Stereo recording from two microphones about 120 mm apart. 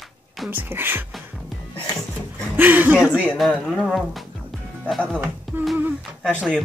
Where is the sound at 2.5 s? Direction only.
15° right (ahead or behind); by 4.2 s centre (ahead or behind).